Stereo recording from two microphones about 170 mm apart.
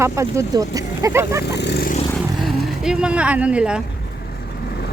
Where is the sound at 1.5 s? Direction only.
80° left.